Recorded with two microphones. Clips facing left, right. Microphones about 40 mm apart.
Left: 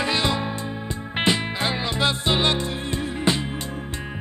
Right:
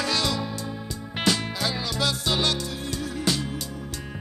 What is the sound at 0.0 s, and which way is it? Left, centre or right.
Music, left.